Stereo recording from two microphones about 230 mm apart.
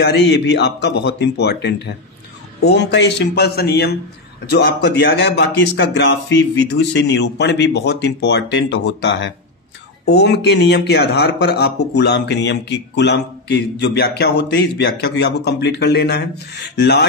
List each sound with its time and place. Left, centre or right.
0.6 s speech: left